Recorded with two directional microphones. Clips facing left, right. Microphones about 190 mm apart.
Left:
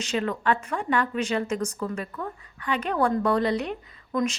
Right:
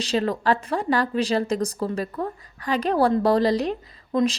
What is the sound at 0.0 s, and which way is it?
A woman's voice, 35° right (ahead or behind).